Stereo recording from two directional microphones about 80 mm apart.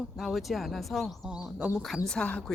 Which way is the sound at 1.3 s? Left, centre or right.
Centre.